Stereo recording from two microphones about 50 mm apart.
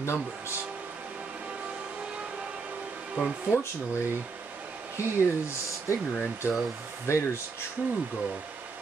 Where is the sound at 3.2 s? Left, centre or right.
Right.